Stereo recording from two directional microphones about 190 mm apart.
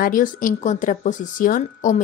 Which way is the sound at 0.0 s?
45° left (ahead or behind).